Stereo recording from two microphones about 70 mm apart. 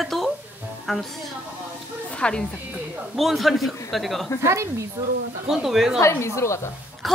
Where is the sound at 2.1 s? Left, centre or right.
Centre.